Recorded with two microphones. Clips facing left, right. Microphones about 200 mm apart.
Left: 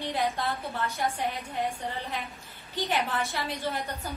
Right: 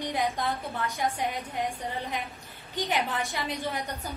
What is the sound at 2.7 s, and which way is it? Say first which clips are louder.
A woman's voice: even; 15° right (ahead or behind).